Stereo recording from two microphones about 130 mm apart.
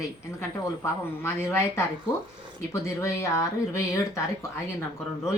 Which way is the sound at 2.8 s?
25° left (ahead or behind).